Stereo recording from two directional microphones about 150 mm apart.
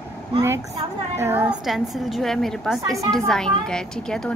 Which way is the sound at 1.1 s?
15° right (ahead or behind).